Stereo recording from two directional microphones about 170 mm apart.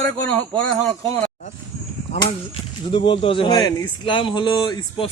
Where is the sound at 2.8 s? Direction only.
30° left (ahead or behind).